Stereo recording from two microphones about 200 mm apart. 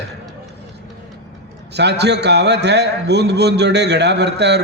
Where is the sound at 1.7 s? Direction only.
55° right (ahead or behind).